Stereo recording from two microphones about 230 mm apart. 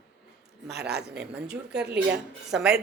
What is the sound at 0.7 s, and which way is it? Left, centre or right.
Speech, right.